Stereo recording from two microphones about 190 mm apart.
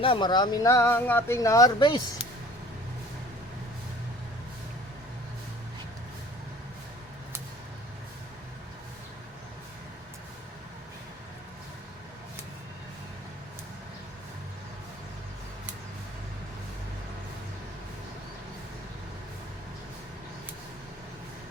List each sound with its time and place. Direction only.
0.0 s speech: 25° left (ahead or behind)